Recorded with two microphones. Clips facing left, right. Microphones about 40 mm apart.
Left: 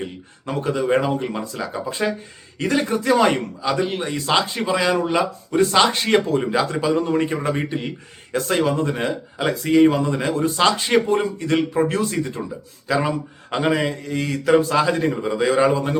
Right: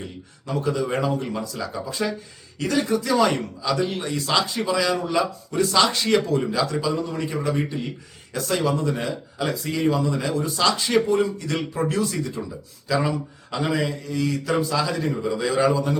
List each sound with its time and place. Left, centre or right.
0.0 s a man's voice: left